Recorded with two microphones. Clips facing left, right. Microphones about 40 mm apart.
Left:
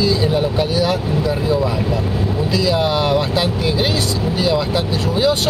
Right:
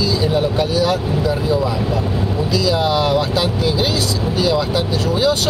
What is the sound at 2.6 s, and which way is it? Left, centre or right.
Speech, centre.